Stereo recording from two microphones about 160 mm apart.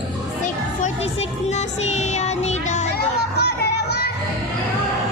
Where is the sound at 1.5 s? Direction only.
45° left (ahead or behind).